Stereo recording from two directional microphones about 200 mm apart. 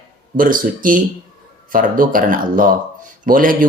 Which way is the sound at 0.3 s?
45° right (ahead or behind).